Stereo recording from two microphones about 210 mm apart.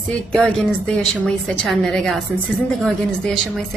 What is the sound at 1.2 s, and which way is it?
A woman's voice, centre (ahead or behind).